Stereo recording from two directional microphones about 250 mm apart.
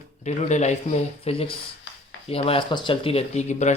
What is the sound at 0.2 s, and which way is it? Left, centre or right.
Speech, left.